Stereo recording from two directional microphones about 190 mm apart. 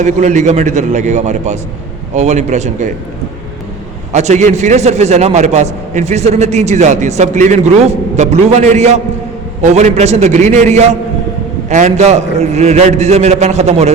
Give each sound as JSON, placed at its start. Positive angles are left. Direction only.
{"t": 0.0, "sound": "a man's voice", "side_deg": -40}
{"t": 4.1, "sound": "a man's voice", "side_deg": -35}